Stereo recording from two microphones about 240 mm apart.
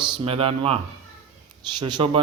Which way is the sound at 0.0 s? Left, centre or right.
Right.